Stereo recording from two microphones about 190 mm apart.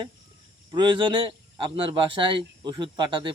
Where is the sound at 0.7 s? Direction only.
25° right (ahead or behind).